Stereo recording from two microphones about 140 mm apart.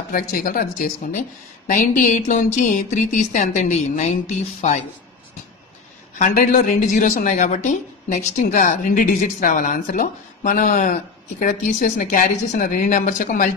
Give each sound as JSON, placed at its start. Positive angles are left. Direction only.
{"t": 0.1, "sound": "speech", "side_deg": 85}
{"t": 1.7, "sound": "a woman's voice", "side_deg": 60}
{"t": 6.1, "sound": "a woman's voice", "side_deg": 65}